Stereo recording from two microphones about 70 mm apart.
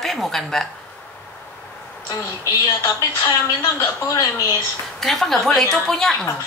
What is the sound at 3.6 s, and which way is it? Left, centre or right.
Speech, left.